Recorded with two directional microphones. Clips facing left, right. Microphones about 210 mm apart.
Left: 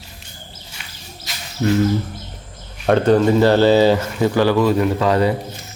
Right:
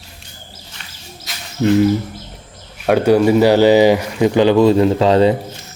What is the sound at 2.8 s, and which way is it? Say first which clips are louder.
Speech: right 2 dB; 10° right (ahead or behind).